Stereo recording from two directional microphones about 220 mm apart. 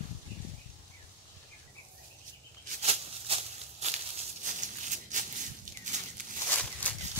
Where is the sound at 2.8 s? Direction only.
30° right (ahead or behind).